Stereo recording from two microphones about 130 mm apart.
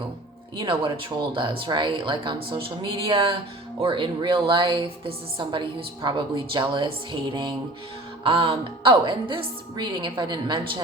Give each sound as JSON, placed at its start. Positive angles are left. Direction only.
{"t": 0.6, "sound": "a woman's voice", "side_deg": -40}